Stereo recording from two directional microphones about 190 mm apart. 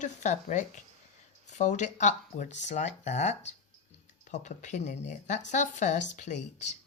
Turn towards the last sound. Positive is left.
turn(degrees=40)  # may be behind; listen again after turning